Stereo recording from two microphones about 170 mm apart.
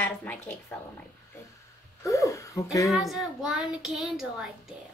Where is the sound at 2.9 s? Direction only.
Centre (ahead or behind).